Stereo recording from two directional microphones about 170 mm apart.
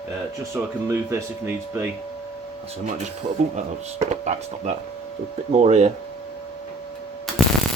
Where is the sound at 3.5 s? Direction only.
40° right (ahead or behind).